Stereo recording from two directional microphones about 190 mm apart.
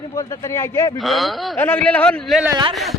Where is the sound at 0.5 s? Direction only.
15° left (ahead or behind).